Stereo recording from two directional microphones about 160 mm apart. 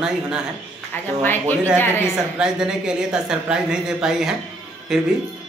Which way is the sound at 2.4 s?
5° right (ahead or behind).